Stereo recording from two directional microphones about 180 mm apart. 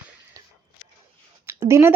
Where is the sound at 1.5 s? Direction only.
15° right (ahead or behind).